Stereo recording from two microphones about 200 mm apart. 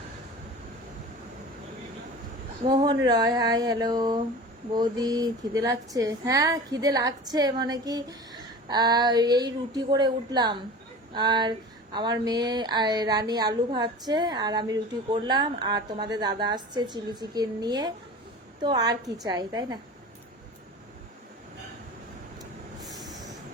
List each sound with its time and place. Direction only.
2.6 s speech: 25° right (ahead or behind)
22.9 s train: centre (ahead or behind)